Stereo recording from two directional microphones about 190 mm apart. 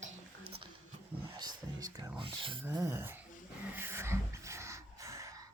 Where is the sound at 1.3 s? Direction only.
20° right (ahead or behind).